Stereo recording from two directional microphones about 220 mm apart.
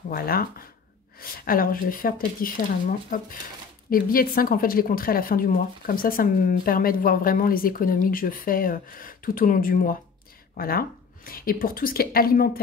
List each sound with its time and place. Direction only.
0.1 s speech: 40° left (ahead or behind)